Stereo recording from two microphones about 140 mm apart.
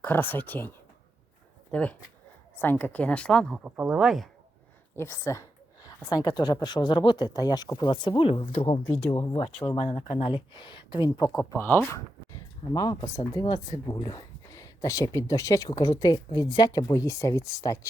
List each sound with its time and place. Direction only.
0.0 s speech: 15° left (ahead or behind)
1.7 s speech: 10° left (ahead or behind)
3.6 s speech: 5° right (ahead or behind)
4.9 s a woman's voice: 20° left (ahead or behind)
9.7 s speech: 45° left (ahead or behind)
11.5 s speech: 15° left (ahead or behind)